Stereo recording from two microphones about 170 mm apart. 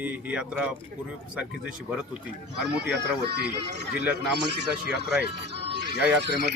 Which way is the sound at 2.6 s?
80° right.